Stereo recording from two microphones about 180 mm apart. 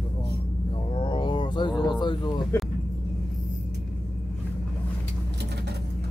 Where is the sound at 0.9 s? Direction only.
30° left (ahead or behind).